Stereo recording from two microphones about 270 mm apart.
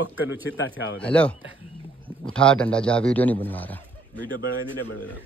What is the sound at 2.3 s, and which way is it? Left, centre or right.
A man's voice, centre.